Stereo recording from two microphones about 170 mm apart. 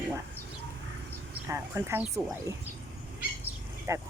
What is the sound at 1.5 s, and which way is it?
A woman's voice, 15° right (ahead or behind).